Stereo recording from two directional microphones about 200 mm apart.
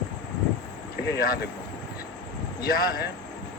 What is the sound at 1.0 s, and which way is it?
Speech, 55° left (ahead or behind).